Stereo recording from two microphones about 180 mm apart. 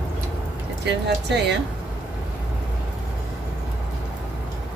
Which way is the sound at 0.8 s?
70° right (ahead or behind).